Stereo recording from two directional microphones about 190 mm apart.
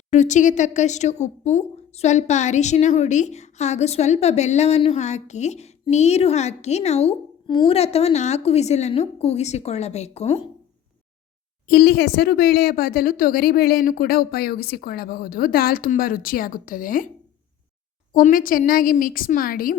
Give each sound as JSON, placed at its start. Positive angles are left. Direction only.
{"t": 0.1, "sound": "a woman's voice", "side_deg": 40}
{"t": 11.7, "sound": "a woman's voice", "side_deg": 55}
{"t": 18.1, "sound": "a woman's voice", "side_deg": 45}